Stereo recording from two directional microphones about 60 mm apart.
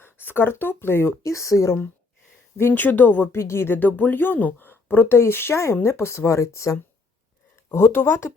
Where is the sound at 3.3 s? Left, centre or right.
Left.